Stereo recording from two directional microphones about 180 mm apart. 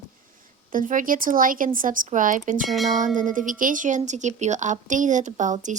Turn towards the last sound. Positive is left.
turn(degrees=-45)  # may be behind; listen again after turning